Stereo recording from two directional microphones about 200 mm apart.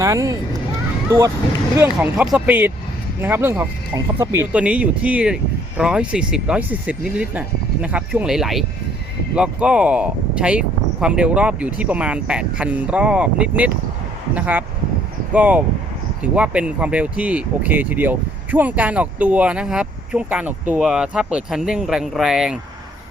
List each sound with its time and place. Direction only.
0.0 s speech: 15° right (ahead or behind)
1.7 s speech: 10° right (ahead or behind)